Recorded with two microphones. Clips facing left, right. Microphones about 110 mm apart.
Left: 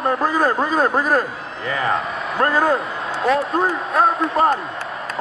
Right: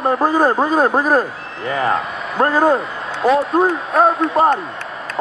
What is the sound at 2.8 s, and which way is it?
A man's voice, centre (ahead or behind).